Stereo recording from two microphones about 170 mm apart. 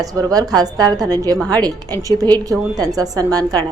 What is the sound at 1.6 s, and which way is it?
A woman's voice, 20° right (ahead or behind).